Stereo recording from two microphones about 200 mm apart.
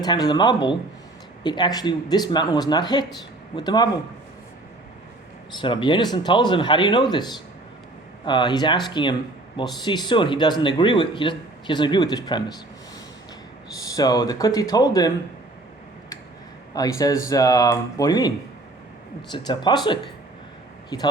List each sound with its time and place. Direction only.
0.0 s speech: 20° left (ahead or behind)
5.5 s speech: 25° left (ahead or behind)
13.7 s speech: 20° left (ahead or behind)
16.7 s speech: 20° left (ahead or behind)